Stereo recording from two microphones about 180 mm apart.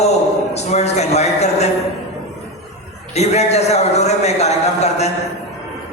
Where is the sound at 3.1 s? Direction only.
35° left (ahead or behind).